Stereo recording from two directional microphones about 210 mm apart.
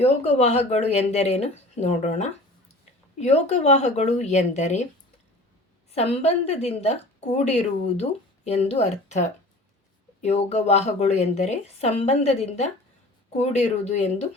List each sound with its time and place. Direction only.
0.0 s speech: 30° left (ahead or behind)
5.9 s speech: 30° left (ahead or behind)